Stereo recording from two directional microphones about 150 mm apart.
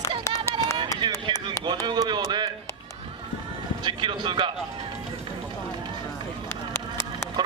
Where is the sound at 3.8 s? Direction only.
30° right (ahead or behind).